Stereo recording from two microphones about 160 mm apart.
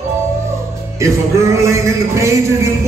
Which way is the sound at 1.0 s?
20° right (ahead or behind).